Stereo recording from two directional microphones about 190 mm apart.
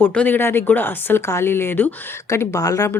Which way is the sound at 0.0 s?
10° left (ahead or behind).